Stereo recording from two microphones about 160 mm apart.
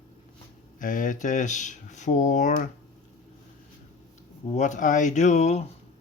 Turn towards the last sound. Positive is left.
turn(degrees=45)  # may be behind; listen again after turning